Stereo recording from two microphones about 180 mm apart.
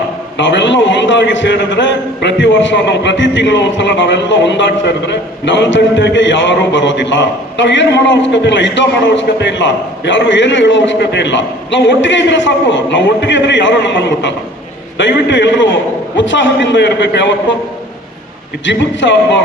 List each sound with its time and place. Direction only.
0.3 s a man's voice: 90° left
18.6 s a man's voice: 90° left